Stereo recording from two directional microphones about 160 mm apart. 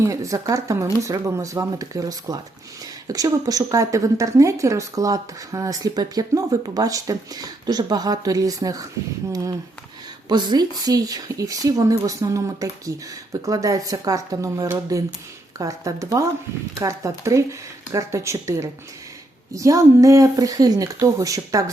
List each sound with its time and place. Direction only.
0.0 s speech: 20° right (ahead or behind)